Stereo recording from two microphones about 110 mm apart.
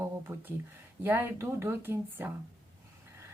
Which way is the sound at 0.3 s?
20° right (ahead or behind).